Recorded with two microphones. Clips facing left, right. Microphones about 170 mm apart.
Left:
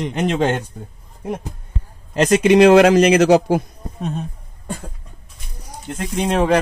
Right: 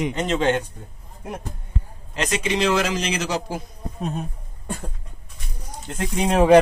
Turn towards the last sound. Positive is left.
turn(degrees=0)  # may be behind; listen again after turning